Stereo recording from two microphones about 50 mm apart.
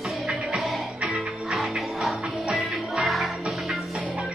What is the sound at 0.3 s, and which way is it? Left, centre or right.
Music, centre.